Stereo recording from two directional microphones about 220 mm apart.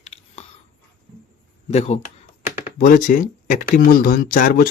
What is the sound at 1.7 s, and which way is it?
Speech, 30° left (ahead or behind).